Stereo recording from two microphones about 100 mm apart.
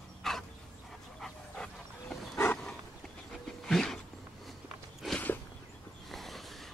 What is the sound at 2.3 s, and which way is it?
Roaring cats, 25° left (ahead or behind).